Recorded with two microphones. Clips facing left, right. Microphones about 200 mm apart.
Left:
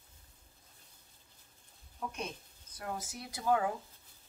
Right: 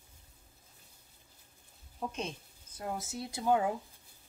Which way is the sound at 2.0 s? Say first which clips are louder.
Right 3 dB; 25° right (ahead or behind).